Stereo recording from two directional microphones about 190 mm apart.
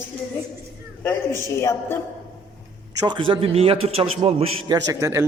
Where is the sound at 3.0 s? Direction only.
25° right (ahead or behind).